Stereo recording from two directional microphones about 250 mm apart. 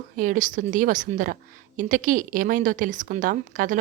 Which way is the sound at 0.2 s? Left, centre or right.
Right.